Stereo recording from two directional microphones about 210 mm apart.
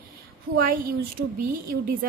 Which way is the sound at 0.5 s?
40° right (ahead or behind).